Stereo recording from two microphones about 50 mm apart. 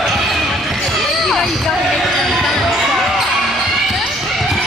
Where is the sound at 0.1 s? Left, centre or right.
Centre.